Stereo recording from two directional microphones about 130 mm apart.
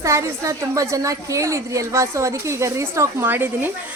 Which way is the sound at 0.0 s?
25° right (ahead or behind).